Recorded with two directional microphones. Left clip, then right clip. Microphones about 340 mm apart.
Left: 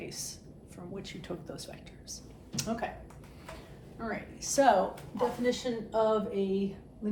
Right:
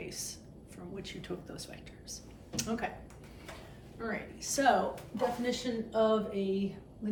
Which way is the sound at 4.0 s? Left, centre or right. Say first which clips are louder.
Left 1 dB; centre.